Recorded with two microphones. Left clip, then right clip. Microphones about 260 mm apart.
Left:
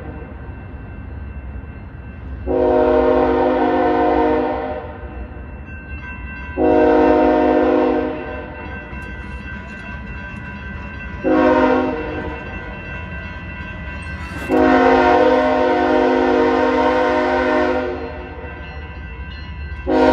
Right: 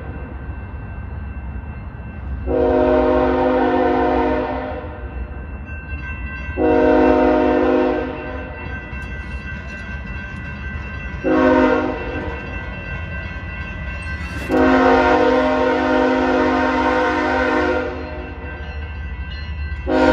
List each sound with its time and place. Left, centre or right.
2.5 s train: left
6.6 s train: left
11.2 s train: left
12.5 s train: centre
14.5 s train: left
19.9 s train: left